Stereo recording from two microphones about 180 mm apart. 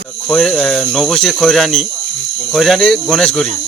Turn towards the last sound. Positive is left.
turn(degrees=5)  # may be behind; listen again after turning